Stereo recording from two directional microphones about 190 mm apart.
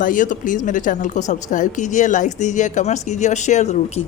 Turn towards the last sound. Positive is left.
turn(degrees=40)  # may be behind; listen again after turning